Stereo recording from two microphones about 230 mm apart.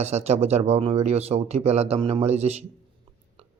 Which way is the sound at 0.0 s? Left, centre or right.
Right.